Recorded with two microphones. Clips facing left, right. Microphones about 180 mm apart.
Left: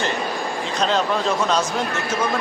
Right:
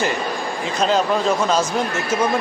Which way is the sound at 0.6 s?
5° right (ahead or behind).